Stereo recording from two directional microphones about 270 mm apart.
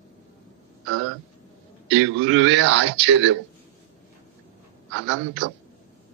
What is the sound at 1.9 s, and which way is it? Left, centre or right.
A man's voice, right.